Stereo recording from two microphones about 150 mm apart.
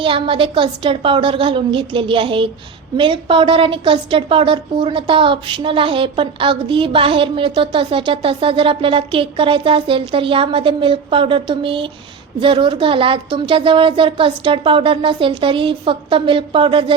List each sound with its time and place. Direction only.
0.0 s a woman's voice: 35° right (ahead or behind)